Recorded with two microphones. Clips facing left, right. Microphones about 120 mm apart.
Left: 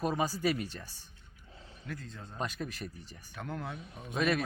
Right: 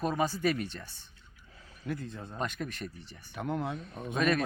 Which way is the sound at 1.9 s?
20° right (ahead or behind).